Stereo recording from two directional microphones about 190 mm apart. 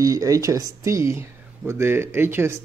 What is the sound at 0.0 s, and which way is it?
Speech, 15° right (ahead or behind).